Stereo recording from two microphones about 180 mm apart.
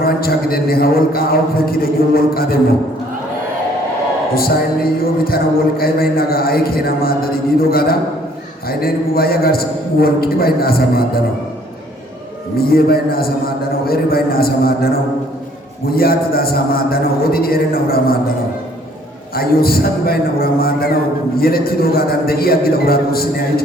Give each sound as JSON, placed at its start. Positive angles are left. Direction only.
{"t": 0.0, "sound": "a man's voice", "side_deg": 55}
{"t": 5.2, "sound": "a man's voice", "side_deg": 55}
{"t": 12.5, "sound": "a man's voice", "side_deg": 55}
{"t": 15.9, "sound": "a man's voice", "side_deg": 55}
{"t": 19.4, "sound": "a man's voice", "side_deg": 55}